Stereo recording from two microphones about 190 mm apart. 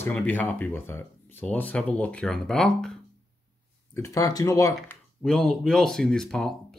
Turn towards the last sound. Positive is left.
turn(degrees=0)  # may be behind; listen again after turning